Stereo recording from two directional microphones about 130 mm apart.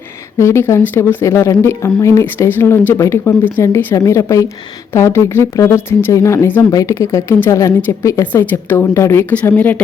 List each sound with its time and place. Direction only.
0.3 s speech: 20° left (ahead or behind)